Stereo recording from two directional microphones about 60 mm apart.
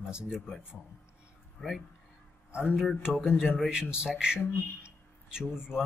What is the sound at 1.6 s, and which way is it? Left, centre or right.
Speech, centre.